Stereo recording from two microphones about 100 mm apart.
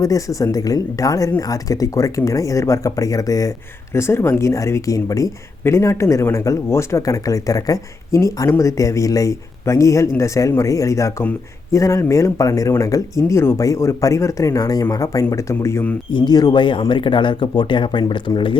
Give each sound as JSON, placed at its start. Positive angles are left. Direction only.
{"t": 0.0, "sound": "speech", "side_deg": 35}
{"t": 3.9, "sound": "speech", "side_deg": 25}
{"t": 16.1, "sound": "speech", "side_deg": 45}